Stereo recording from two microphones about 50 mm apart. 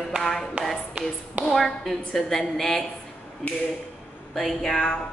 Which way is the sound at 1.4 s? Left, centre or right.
Centre.